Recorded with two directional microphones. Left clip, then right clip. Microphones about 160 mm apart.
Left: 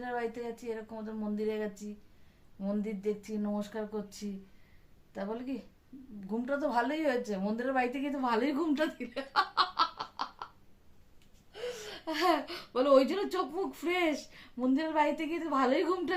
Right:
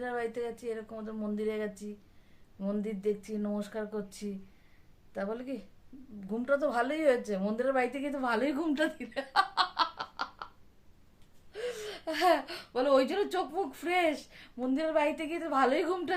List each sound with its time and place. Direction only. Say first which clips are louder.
0.0 s a woman's voice: right 2 dB; 15° right (ahead or behind)
11.5 s speech: right 2 dB; 20° right (ahead or behind)